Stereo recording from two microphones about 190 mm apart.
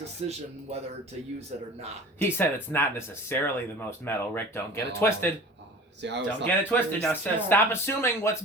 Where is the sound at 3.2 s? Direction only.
10° left (ahead or behind).